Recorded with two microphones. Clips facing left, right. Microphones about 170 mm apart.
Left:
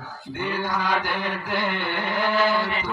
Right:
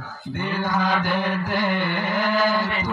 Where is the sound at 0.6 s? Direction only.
45° right (ahead or behind).